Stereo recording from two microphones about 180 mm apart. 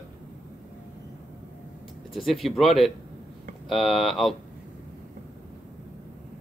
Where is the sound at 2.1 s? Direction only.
Centre (ahead or behind).